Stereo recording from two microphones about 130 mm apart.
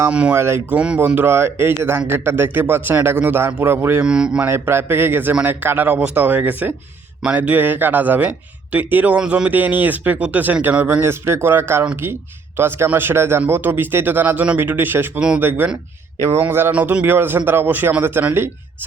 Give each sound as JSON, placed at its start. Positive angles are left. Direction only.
{"t": 0.0, "sound": "speech", "side_deg": -10}
{"t": 4.0, "sound": "speech", "side_deg": -5}